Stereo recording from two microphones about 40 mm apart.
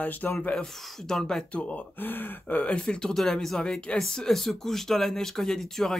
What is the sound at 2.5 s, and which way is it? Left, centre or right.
Speech, left.